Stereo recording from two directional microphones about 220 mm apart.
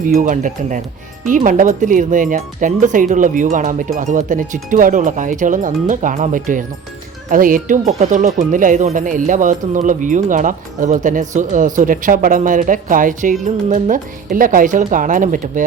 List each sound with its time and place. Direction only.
0.0 s speech: 35° right (ahead or behind)